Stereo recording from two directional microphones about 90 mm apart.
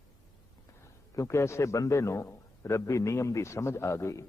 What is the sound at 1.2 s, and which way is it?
A man's voice, 30° left (ahead or behind).